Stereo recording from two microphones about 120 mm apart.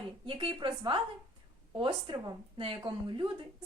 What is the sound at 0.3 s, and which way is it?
Speech, 45° right (ahead or behind).